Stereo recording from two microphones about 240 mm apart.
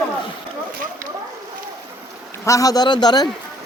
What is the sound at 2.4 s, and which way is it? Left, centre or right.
Speech, centre.